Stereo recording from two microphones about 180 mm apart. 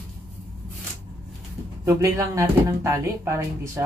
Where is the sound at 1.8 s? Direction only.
15° right (ahead or behind).